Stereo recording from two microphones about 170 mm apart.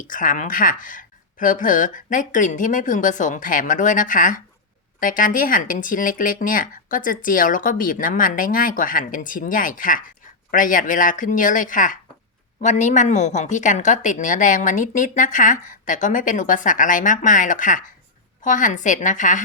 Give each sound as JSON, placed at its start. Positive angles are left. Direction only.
{"t": 0.0, "sound": "a woman's voice", "side_deg": 50}